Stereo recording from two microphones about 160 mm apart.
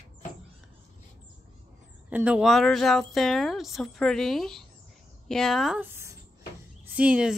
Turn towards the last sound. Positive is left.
turn(degrees=-5)  # may be behind; listen again after turning